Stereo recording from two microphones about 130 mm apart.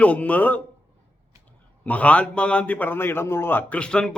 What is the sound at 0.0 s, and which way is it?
Speech, 10° left (ahead or behind).